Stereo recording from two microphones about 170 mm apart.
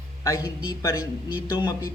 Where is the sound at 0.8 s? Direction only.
20° left (ahead or behind).